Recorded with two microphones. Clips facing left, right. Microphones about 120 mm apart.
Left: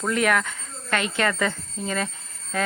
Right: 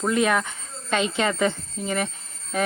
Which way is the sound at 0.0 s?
20° right (ahead or behind).